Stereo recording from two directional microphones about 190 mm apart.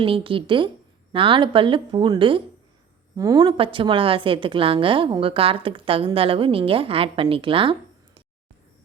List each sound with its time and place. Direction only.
0.0 s speech: 30° right (ahead or behind)